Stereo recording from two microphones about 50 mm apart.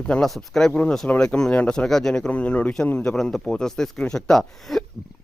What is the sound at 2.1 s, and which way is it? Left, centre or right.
Speech, left.